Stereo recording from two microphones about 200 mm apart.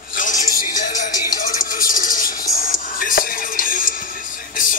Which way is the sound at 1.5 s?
45° left (ahead or behind).